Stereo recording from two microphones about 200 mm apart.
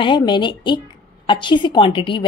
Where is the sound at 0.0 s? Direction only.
25° left (ahead or behind).